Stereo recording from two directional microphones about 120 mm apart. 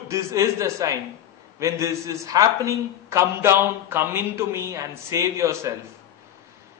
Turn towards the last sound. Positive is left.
turn(degrees=-25)  # may be behind; listen again after turning